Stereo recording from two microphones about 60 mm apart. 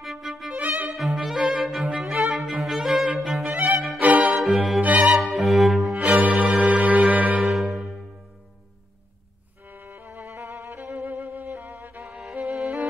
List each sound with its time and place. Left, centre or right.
0.0 s violin: centre
0.6 s music: right
0.9 s music: centre
3.4 s music: right
4.8 s violin: right
5.2 s cello: centre
5.9 s cello: right
6.6 s music: right
7.3 s music: centre
9.7 s music: right
10.8 s music: right
12.1 s music: centre